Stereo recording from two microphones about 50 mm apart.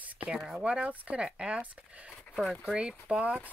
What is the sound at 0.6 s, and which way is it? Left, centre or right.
Speech, right.